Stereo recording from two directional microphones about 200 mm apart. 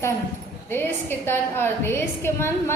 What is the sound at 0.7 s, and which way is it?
A woman's voice, 10° left (ahead or behind).